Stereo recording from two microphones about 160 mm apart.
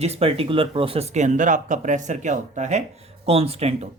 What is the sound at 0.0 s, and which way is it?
Speech, 40° right (ahead or behind).